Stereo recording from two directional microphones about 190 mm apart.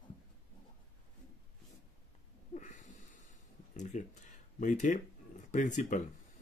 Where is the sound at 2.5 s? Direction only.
40° left (ahead or behind).